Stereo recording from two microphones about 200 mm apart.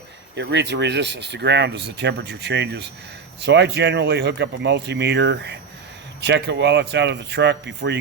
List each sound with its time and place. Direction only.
0.3 s speech: 60° right (ahead or behind)